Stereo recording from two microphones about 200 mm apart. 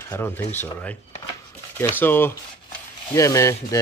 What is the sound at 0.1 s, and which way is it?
Speech, 10° left (ahead or behind).